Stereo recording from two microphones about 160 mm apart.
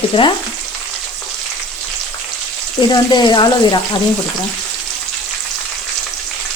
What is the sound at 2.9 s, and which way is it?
Frying, 25° left (ahead or behind).